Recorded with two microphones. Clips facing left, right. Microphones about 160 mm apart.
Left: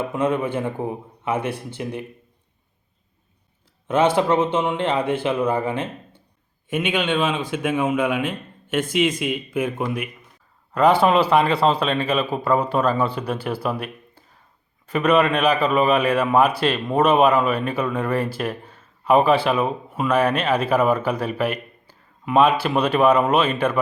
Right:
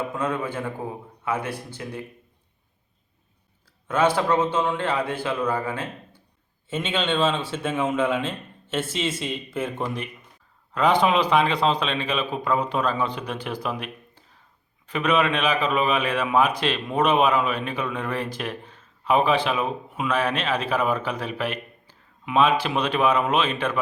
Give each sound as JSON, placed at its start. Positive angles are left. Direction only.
{"t": 0.1, "sound": "a man's voice", "side_deg": 20}
{"t": 3.8, "sound": "a man's voice", "side_deg": 25}